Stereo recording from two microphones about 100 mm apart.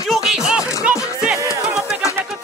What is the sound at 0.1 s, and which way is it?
Music, 5° right (ahead or behind).